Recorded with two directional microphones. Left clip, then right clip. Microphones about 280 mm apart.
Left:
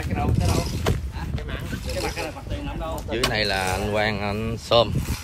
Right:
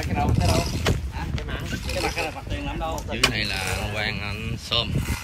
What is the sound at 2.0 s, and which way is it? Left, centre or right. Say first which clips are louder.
Boat: right 3 dB; right.